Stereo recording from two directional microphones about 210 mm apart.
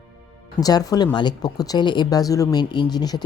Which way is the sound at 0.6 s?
15° left (ahead or behind).